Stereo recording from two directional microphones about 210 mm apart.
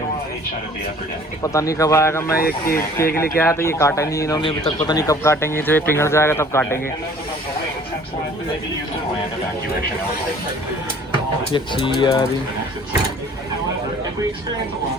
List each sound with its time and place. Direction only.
1.4 s speech: 15° left (ahead or behind)
2.4 s speech: 45° left (ahead or behind)
3.3 s speech: 10° left (ahead or behind)
11.5 s speech: 25° left (ahead or behind)